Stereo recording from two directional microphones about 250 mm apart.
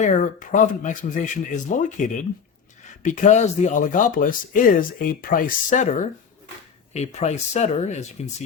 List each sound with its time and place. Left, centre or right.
0.0 s speech: left